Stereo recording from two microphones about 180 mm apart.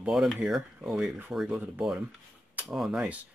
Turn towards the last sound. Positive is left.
turn(degrees=-5)  # may be behind; listen again after turning